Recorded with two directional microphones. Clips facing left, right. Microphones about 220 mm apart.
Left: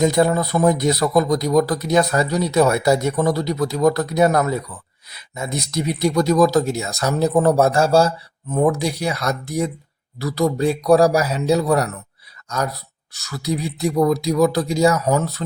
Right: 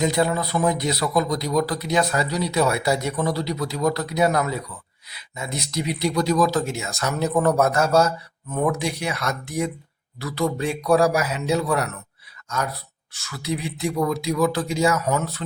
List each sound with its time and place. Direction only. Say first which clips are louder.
0.0 s speech: left 5 dB; 45° left (ahead or behind)